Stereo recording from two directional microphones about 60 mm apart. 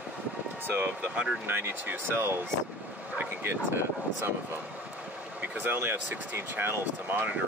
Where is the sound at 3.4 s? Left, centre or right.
Right.